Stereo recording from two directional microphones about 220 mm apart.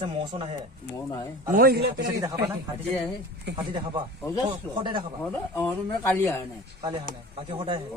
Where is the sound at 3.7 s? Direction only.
20° right (ahead or behind).